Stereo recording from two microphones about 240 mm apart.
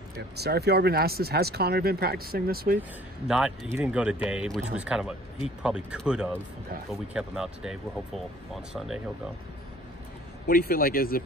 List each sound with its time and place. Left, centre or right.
0.4 s speech: right
3.3 s speech: centre
8.7 s speech: centre
10.4 s speech: left